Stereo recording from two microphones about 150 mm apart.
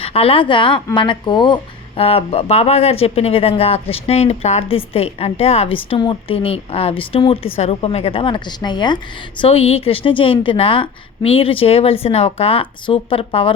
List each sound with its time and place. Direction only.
0.0 s a woman's voice: 40° left (ahead or behind)
9.4 s speech: 40° left (ahead or behind)